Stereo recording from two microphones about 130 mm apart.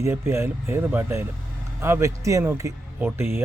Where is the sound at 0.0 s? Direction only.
20° right (ahead or behind).